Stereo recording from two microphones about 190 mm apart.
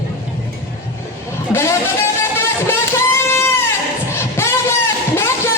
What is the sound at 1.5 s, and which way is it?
Vehicle, 15° left (ahead or behind).